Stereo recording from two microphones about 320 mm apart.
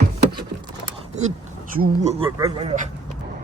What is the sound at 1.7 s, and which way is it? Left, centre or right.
Speech, right.